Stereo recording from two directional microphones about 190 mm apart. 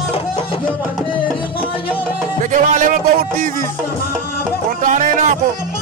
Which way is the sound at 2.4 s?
45° right (ahead or behind).